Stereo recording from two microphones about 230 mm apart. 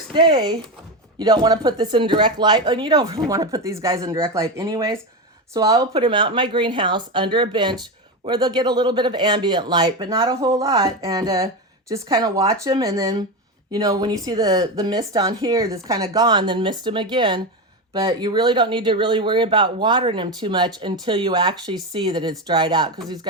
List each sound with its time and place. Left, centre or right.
0.1 s speech: right